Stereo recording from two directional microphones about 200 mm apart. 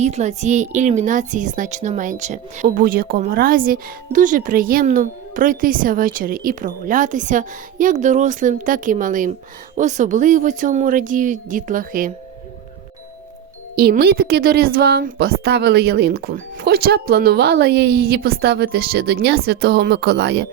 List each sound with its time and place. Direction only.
0.0 s a woman's voice: 35° right (ahead or behind)
13.7 s a woman's voice: 50° right (ahead or behind)